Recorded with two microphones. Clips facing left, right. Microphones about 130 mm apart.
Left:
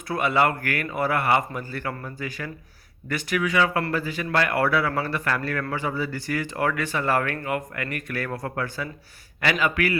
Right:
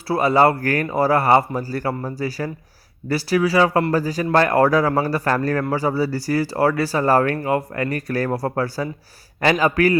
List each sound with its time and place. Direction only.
0.1 s a man's voice: 35° right (ahead or behind)